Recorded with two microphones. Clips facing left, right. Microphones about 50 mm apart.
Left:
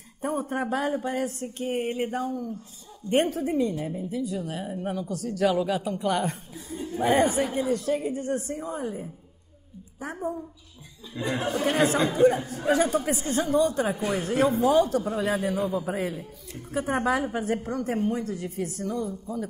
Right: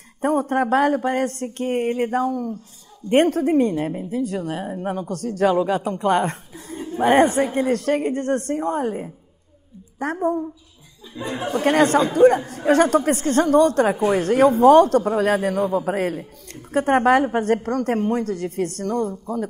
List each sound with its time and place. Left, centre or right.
0.2 s speech: right
4.6 s speech: right
11.1 s speech: left
11.6 s speech: right